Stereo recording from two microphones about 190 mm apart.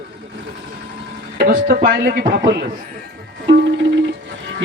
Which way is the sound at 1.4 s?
60° right (ahead or behind).